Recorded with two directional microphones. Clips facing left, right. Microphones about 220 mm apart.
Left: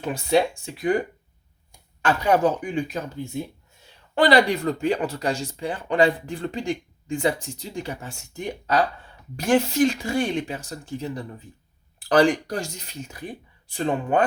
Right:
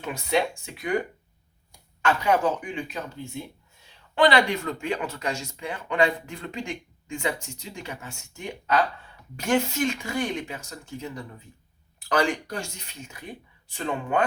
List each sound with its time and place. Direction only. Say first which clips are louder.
0.0 s speech: left 4 dB; 35° left (ahead or behind)
2.0 s speech: left 3 dB; 35° left (ahead or behind)
4.1 s speech: left 3 dB; 40° left (ahead or behind)